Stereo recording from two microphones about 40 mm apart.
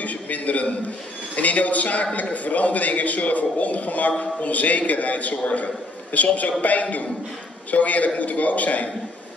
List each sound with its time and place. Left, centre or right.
0.0 s a man's voice: left